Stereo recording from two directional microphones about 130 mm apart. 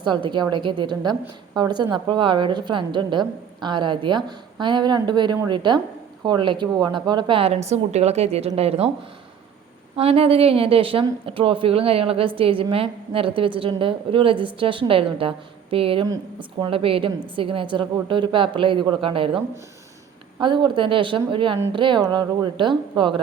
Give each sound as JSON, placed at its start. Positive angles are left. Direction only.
{"t": 0.0, "sound": "a woman's voice", "side_deg": -35}
{"t": 9.9, "sound": "a woman's voice", "side_deg": -50}
{"t": 20.4, "sound": "a woman's voice", "side_deg": -35}